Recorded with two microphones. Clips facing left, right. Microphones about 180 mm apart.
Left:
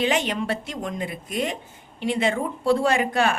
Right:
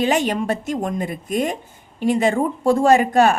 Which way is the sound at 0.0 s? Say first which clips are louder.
Right 4 dB; 45° right (ahead or behind).